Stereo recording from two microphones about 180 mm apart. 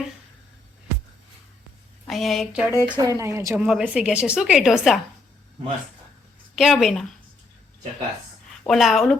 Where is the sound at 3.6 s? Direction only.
5° right (ahead or behind).